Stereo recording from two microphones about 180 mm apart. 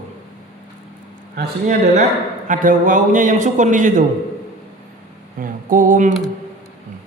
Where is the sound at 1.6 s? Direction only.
40° right (ahead or behind).